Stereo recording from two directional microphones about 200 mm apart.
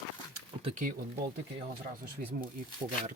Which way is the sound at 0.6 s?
35° right (ahead or behind).